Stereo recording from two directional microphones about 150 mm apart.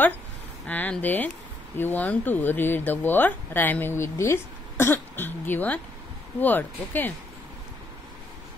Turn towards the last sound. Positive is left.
turn(degrees=10)  # may be behind; listen again after turning